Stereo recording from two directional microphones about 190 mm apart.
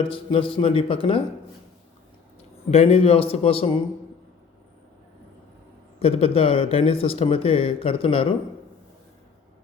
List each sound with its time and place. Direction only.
0.0 s speech: 30° left (ahead or behind)
2.6 s a man's voice: 35° left (ahead or behind)
6.0 s speech: 30° left (ahead or behind)